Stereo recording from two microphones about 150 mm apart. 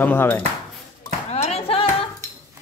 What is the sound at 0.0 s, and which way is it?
Speech, 15° left (ahead or behind).